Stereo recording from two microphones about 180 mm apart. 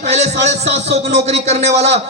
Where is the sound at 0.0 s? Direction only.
35° right (ahead or behind).